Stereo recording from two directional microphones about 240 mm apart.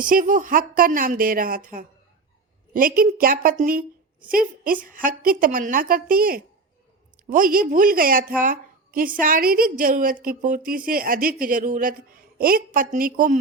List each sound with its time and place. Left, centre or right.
0.0 s speech: right
8.4 s a sound: right
9.2 s speech: right